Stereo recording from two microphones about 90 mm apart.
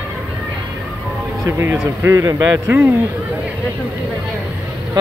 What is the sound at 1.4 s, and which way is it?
Speech, 30° right (ahead or behind).